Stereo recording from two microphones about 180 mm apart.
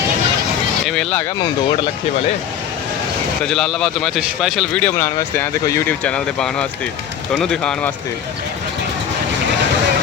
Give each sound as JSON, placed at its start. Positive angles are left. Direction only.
{"t": 0.9, "sound": "speech", "side_deg": 5}
{"t": 1.4, "sound": "speech", "side_deg": 25}
{"t": 3.4, "sound": "speech", "side_deg": 0}